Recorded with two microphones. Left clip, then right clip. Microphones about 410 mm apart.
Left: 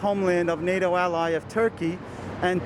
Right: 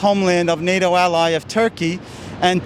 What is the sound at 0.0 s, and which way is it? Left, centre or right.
Speech, right.